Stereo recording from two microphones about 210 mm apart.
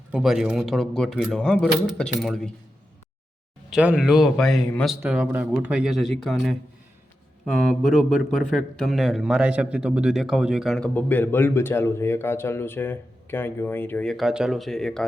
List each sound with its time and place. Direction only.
0.1 s a man's voice: centre (ahead or behind)
3.7 s a man's voice: 5° right (ahead or behind)